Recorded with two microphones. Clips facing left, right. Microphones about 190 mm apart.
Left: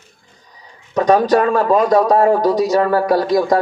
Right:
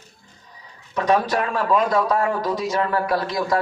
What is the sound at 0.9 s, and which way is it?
A man's voice, 40° left (ahead or behind).